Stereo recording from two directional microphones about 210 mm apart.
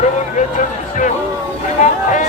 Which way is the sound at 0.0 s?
35° left (ahead or behind).